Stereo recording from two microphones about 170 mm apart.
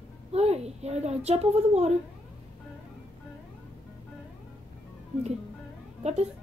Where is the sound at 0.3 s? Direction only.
40° right (ahead or behind).